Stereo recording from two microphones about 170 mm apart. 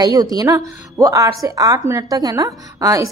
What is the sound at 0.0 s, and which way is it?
A woman's voice, 25° right (ahead or behind).